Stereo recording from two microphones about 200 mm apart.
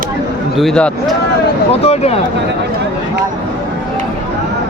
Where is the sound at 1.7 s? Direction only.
30° left (ahead or behind).